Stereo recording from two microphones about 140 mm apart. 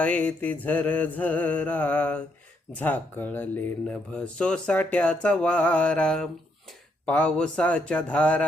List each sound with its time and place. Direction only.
0.0 s speech: 10° left (ahead or behind)